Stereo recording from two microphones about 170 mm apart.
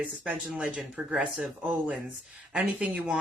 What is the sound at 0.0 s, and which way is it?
A man's voice, 10° right (ahead or behind).